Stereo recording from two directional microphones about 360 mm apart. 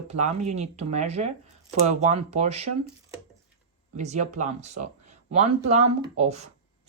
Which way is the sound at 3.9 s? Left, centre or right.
Centre.